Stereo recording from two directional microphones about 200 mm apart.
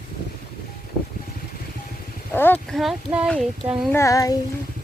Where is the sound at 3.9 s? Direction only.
15° left (ahead or behind).